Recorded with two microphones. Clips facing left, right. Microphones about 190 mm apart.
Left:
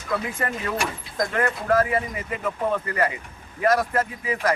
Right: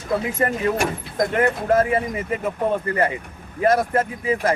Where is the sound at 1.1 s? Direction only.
25° right (ahead or behind).